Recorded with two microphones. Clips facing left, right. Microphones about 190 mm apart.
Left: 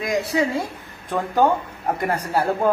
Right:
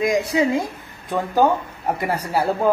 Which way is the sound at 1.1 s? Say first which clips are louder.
Right 1 dB; 5° right (ahead or behind).